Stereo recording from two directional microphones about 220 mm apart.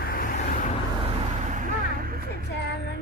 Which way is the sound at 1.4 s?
35° right (ahead or behind).